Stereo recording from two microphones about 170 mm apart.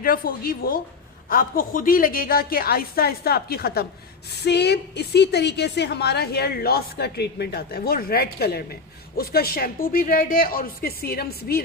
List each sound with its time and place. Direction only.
0.0 s a woman's voice: 60° left (ahead or behind)
4.3 s a woman's voice: 80° left